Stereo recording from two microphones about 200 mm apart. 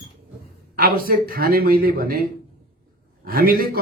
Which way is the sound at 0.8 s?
45° right (ahead or behind).